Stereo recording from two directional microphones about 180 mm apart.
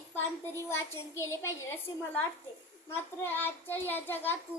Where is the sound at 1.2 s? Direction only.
15° left (ahead or behind).